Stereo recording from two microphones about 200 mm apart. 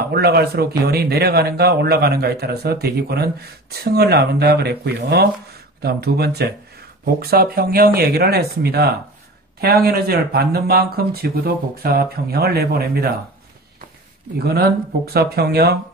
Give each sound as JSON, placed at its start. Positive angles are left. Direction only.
{"t": 0.1, "sound": "speech", "side_deg": -50}
{"t": 15.1, "sound": "speech", "side_deg": -50}